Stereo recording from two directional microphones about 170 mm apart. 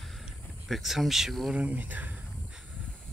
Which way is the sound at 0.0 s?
Centre (ahead or behind).